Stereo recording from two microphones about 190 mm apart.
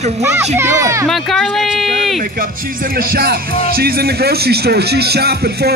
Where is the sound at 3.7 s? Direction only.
55° right (ahead or behind).